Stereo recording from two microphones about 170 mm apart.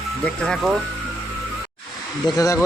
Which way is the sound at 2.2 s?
20° left (ahead or behind).